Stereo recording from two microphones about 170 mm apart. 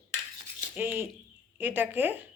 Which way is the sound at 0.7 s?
15° right (ahead or behind).